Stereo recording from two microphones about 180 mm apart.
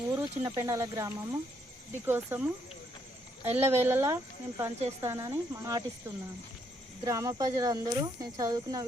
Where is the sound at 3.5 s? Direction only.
10° right (ahead or behind).